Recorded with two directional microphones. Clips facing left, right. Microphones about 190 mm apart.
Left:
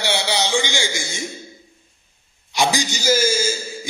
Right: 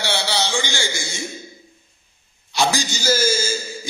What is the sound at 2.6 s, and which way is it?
Speech, 15° left (ahead or behind).